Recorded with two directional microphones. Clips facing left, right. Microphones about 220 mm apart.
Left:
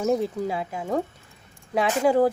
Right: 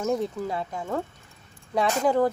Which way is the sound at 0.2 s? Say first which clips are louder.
Left 2 dB; 10° left (ahead or behind).